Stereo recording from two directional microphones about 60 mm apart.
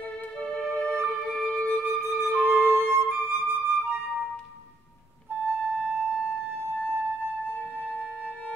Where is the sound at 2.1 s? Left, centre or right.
Left.